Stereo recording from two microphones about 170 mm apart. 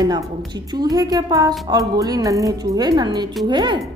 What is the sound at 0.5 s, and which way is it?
A woman's voice, 25° right (ahead or behind).